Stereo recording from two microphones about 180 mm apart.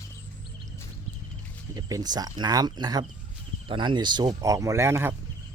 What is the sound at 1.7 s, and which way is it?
Speech, 20° right (ahead or behind).